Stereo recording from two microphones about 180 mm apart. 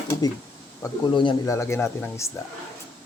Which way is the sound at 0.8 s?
25° left (ahead or behind).